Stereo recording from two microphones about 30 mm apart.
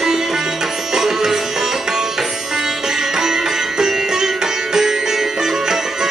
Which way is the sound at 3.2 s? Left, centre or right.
Centre.